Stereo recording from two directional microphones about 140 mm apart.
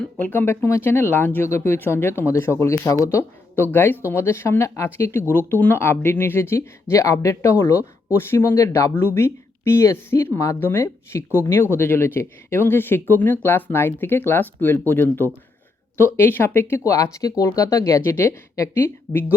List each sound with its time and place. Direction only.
0.0 s speech: 10° left (ahead or behind)